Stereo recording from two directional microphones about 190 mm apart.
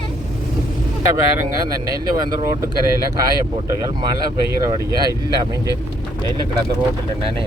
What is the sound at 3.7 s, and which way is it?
Speech, 20° right (ahead or behind).